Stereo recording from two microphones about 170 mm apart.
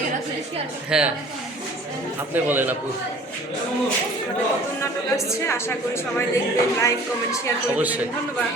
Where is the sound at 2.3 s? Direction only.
10° right (ahead or behind).